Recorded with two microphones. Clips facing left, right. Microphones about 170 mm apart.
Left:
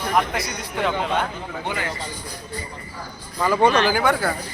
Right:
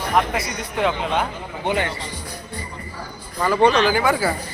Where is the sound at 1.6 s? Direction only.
20° right (ahead or behind).